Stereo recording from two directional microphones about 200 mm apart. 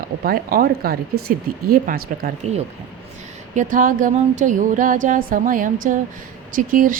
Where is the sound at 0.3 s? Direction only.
45° right (ahead or behind).